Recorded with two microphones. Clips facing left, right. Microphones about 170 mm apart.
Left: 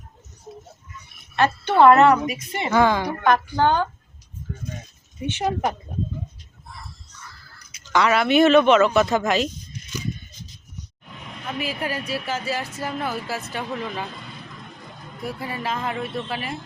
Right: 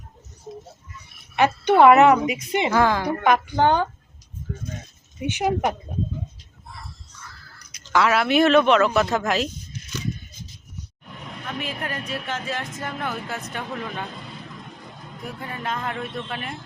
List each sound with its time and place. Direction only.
1.6 s a woman's voice: 15° right (ahead or behind)
2.7 s speech: centre (ahead or behind)
3.2 s a woman's voice: 15° right (ahead or behind)
5.2 s a woman's voice: 10° right (ahead or behind)
7.7 s speech: centre (ahead or behind)
11.4 s speech: 5° left (ahead or behind)
15.2 s speech: 10° left (ahead or behind)